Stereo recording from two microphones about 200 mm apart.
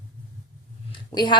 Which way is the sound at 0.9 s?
25° left (ahead or behind).